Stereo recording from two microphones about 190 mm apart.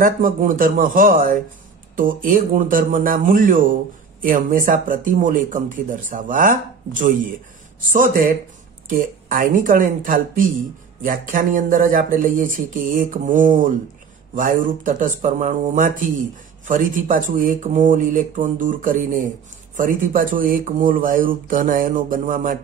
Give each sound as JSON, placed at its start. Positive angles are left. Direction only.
{"t": 0.0, "sound": "speech", "side_deg": -45}